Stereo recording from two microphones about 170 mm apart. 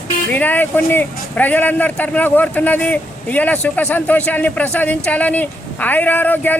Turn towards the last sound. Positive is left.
turn(degrees=10)  # may be behind; listen again after turning